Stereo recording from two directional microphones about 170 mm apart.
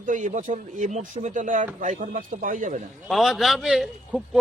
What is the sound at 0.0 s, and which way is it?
Speech, 50° right (ahead or behind).